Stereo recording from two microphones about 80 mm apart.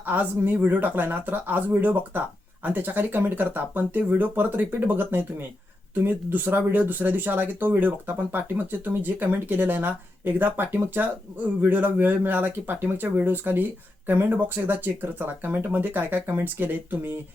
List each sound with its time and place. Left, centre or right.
0.0 s speech: right